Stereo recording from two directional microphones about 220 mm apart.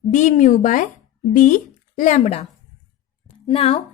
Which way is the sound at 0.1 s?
35° left (ahead or behind).